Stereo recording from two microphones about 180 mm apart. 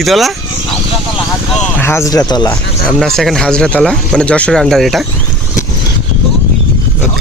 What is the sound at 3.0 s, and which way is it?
Speech, centre (ahead or behind).